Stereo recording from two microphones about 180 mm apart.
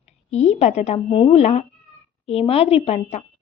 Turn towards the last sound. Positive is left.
turn(degrees=35)  # may be behind; listen again after turning